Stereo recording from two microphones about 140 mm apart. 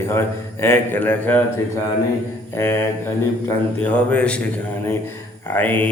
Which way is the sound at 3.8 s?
10° left (ahead or behind).